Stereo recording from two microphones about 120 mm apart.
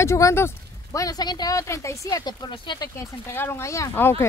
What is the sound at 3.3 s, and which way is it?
Speech, 20° left (ahead or behind).